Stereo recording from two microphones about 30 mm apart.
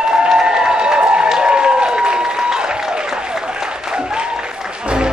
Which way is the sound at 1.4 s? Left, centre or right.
Right.